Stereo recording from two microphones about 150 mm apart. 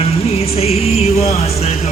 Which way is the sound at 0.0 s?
40° left (ahead or behind).